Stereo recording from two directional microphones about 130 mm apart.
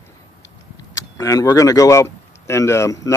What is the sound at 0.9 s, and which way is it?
Speech, 25° left (ahead or behind).